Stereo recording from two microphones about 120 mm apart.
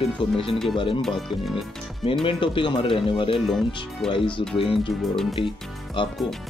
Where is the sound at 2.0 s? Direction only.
50° left (ahead or behind).